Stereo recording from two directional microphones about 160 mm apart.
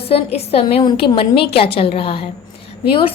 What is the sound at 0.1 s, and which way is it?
A woman's voice, 40° left (ahead or behind).